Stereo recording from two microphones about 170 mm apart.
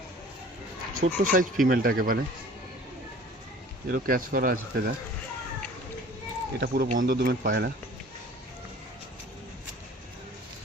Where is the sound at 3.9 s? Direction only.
55° right (ahead or behind).